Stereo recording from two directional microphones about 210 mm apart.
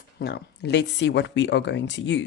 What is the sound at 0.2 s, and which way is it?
Speech, 50° left (ahead or behind).